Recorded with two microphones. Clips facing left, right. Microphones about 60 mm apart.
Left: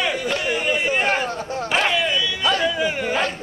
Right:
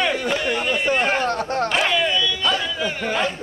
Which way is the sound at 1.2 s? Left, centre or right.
Right.